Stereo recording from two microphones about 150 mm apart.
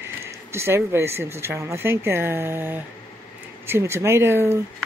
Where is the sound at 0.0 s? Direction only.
15° right (ahead or behind).